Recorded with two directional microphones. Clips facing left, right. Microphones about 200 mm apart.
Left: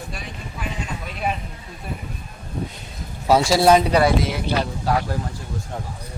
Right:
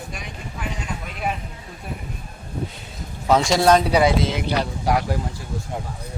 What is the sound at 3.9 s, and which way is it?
Speech, 20° right (ahead or behind).